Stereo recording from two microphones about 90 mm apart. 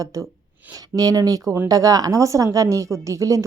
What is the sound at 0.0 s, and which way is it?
A woman's voice, 40° right (ahead or behind).